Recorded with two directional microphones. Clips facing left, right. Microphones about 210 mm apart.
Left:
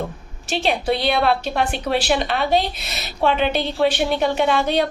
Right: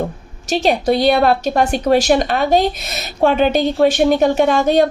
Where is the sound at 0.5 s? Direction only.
40° right (ahead or behind).